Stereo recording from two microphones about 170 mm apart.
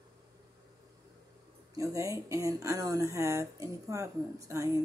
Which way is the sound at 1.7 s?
20° right (ahead or behind).